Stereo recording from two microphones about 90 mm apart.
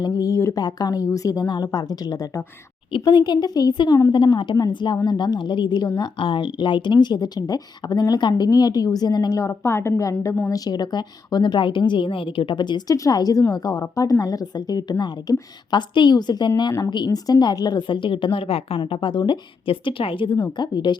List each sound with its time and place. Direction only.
0.0 s a sound: 40° left (ahead or behind)
0.6 s speech: 45° left (ahead or behind)
2.9 s speech: 60° left (ahead or behind)
4.1 s a woman's voice: 60° left (ahead or behind)
6.0 s speech: 75° left (ahead or behind); by 9.4 s 50° left (ahead or behind)
9.4 s a woman's voice: 30° left (ahead or behind)
10.5 s a woman's voice: 45° left (ahead or behind)
12.9 s a woman's voice: 45° left (ahead or behind); by 18.8 s 90° left
18.9 s speech: 65° left (ahead or behind)
20.6 s a woman's voice: 55° left (ahead or behind)